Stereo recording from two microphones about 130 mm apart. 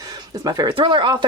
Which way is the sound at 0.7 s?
40° right (ahead or behind).